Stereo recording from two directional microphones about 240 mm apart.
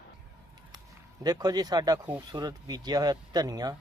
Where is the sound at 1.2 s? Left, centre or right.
Centre.